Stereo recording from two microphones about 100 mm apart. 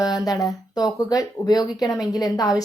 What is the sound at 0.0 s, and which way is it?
Speech, 40° left (ahead or behind).